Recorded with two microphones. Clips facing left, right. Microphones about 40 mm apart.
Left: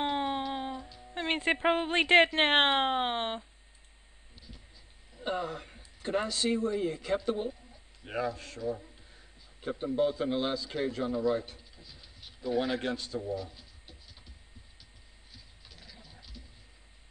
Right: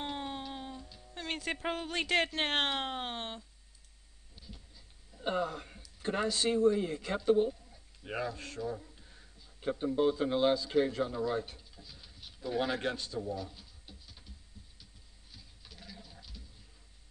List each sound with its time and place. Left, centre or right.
0.0 s a sound: left
0.4 s music: left
1.1 s speech: left
5.4 s speech: centre
6.0 s a man's voice: centre
11.0 s speech: centre
15.7 s goat: centre